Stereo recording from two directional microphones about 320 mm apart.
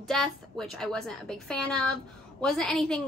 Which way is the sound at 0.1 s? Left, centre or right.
Centre.